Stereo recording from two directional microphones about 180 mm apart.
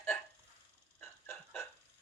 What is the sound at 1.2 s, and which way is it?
Hiccup, 10° left (ahead or behind).